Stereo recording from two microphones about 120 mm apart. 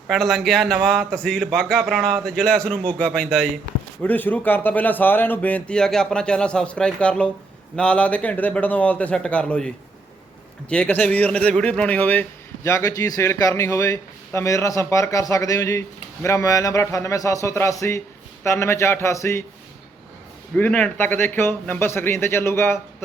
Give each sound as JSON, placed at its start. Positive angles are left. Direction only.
{"t": 0.1, "sound": "a man's voice", "side_deg": 0}
{"t": 12.6, "sound": "a man's voice", "side_deg": 25}
{"t": 20.6, "sound": "a man's voice", "side_deg": 10}